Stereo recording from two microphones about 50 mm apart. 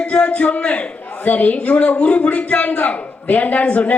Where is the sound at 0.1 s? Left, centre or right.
Left.